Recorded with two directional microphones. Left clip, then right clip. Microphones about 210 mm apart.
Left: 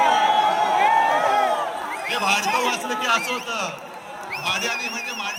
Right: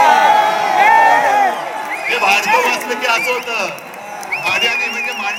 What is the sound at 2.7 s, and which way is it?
A man's voice, 25° left (ahead or behind).